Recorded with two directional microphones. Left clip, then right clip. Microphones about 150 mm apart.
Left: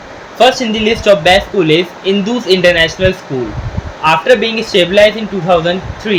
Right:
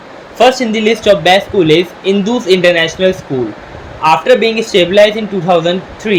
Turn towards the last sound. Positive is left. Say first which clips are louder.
# right 1 dB
turn(degrees=-25)  # may be behind; listen again after turning